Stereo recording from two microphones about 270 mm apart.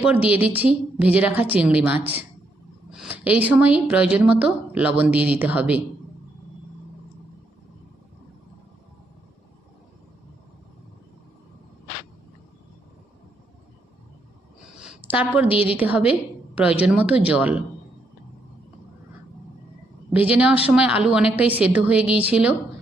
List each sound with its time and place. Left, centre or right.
0.0 s a woman's voice: centre
2.9 s a sound: centre
3.8 s a woman's voice: centre
14.8 s a sound: centre
15.4 s a woman's voice: centre
15.8 s a woman's voice: centre
20.3 s a woman's voice: centre